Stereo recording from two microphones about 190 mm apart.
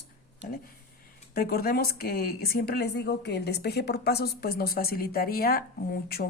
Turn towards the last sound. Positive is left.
turn(degrees=55)  # may be behind; listen again after turning